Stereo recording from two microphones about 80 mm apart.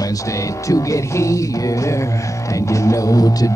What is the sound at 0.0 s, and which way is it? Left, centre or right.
Speech, left.